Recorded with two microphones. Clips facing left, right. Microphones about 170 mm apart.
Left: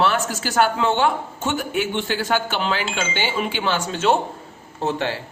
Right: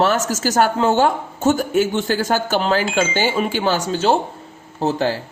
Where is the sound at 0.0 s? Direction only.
40° right (ahead or behind).